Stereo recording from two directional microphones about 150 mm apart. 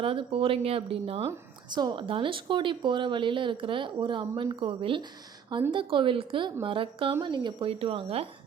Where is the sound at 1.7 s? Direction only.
30° right (ahead or behind).